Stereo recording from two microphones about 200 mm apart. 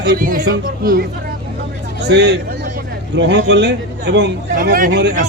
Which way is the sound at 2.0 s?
60° right (ahead or behind).